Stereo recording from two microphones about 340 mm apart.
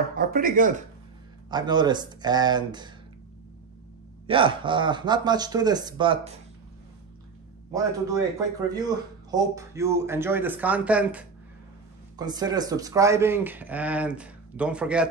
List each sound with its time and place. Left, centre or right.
0.1 s speech: right
1.5 s a man's voice: centre
4.3 s a man's voice: centre
7.7 s a man's voice: centre